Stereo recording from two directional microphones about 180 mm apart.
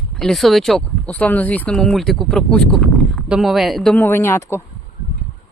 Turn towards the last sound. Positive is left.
turn(degrees=15)  # may be behind; listen again after turning